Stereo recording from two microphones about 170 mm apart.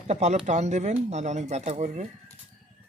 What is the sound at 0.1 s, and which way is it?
Speech, 40° right (ahead or behind).